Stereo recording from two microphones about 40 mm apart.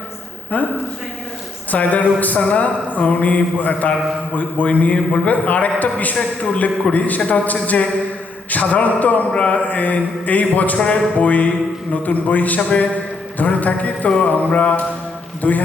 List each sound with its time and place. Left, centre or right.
0.5 s a man's voice: left
1.7 s a man's voice: left
5.3 s a man's voice: left
8.4 s a sound: left
9.5 s a man's voice: left